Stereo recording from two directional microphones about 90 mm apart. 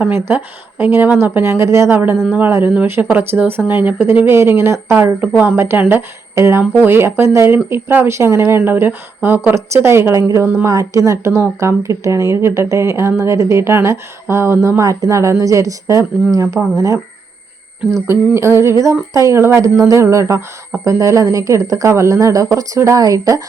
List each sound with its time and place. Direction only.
0.1 s speech: 25° right (ahead or behind)
2.2 s speech: 15° right (ahead or behind)
2.5 s speech: 30° right (ahead or behind)
18.3 s speech: 30° right (ahead or behind)